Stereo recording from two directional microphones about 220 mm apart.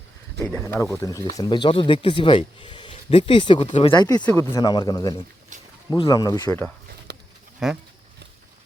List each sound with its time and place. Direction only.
0.4 s speech: 10° left (ahead or behind)
7.6 s speech: centre (ahead or behind)